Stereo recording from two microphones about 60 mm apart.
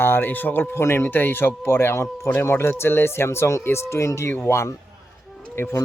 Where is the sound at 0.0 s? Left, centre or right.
Left.